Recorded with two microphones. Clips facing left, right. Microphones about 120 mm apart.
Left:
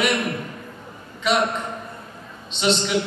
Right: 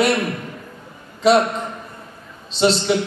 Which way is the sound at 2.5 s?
35° right (ahead or behind).